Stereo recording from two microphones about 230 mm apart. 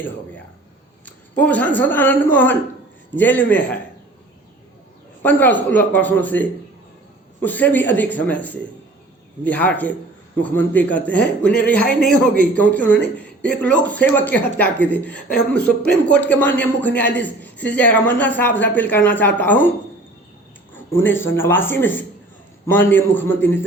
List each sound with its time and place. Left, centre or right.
1.0 s a woman's voice: centre
5.2 s a man's voice: centre
20.9 s a man's voice: centre
23.3 s a man's voice: left